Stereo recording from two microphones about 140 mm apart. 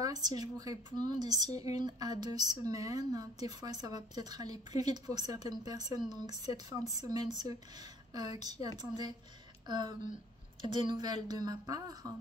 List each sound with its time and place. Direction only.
0.0 s a sound: 25° right (ahead or behind)
0.4 s a woman's voice: 25° right (ahead or behind)
8.6 s a woman's voice: 30° right (ahead or behind)